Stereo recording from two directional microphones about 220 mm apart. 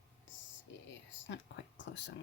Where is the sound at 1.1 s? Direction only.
55° left (ahead or behind).